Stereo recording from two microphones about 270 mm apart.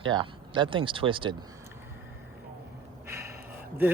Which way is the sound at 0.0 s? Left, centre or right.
Centre.